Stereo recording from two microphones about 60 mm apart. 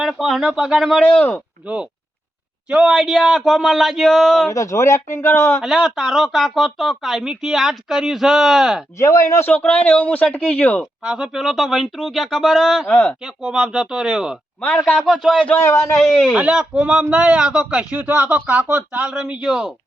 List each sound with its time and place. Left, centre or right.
0.2 s speech: centre
1.6 s a woman's voice: centre
2.9 s speech: centre
4.4 s speech: left
5.6 s speech: centre
9.0 s speech: left
9.5 s speech: left
11.0 s speech: centre
11.3 s speech: centre
12.9 s speech: centre
13.2 s speech: centre
15.5 s speech: left
16.3 s speech: centre
19.1 s speech: centre